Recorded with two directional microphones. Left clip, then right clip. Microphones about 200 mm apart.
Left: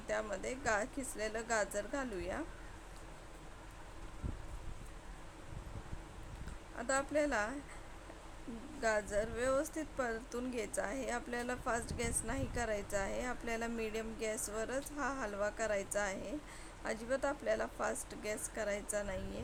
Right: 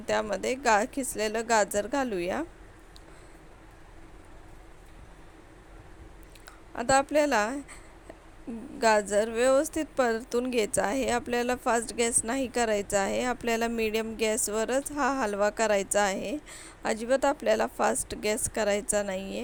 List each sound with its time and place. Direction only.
0.1 s speech: 35° right (ahead or behind)
6.7 s speech: 35° right (ahead or behind)
8.8 s speech: 35° right (ahead or behind)